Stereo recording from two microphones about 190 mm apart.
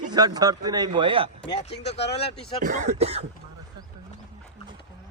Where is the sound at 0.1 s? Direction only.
20° right (ahead or behind).